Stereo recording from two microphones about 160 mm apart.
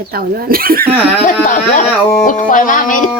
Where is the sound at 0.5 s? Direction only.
65° right (ahead or behind).